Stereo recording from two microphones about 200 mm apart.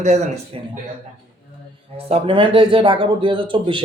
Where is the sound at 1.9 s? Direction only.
30° right (ahead or behind).